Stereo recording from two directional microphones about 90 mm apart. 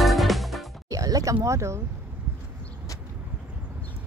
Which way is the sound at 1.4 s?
35° right (ahead or behind).